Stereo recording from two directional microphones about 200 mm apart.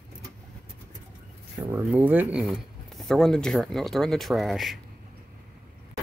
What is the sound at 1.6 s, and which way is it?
Speech, 15° right (ahead or behind).